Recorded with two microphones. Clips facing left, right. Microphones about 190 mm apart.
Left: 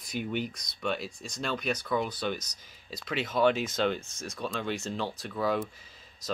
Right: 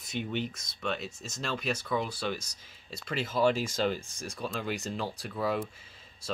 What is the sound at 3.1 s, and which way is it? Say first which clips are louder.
Speech: left 1 dB; centre (ahead or behind).